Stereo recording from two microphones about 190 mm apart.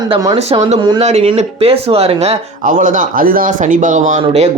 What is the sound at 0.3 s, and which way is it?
Speech, 35° right (ahead or behind).